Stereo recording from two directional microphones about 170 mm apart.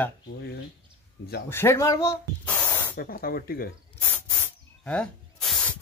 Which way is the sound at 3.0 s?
60° left (ahead or behind).